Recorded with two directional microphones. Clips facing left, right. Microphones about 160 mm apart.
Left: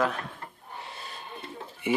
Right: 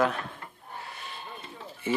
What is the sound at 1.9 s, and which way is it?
Speech, 15° left (ahead or behind).